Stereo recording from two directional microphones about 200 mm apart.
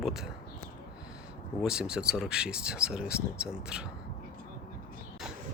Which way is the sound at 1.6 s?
5° right (ahead or behind).